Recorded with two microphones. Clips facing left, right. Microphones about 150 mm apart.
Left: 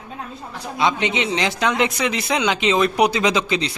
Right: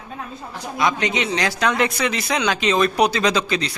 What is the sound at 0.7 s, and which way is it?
Speech, 25° left (ahead or behind).